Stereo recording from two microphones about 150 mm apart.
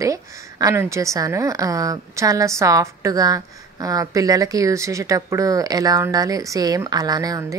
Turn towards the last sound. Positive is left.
turn(degrees=-20)  # may be behind; listen again after turning